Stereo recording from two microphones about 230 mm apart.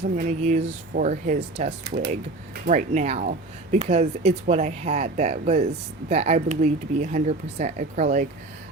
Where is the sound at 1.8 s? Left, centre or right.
Right.